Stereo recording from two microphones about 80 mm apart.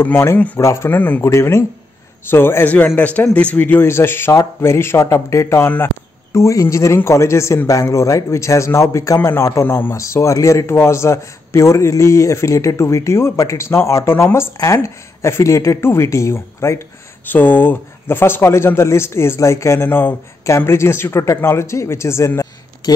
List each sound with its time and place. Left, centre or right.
0.0 s a man's voice: left
1.2 s a man's voice: left
3.0 s a man's voice: centre; by 16.8 s left
17.3 s a man's voice: left
22.8 s speech: left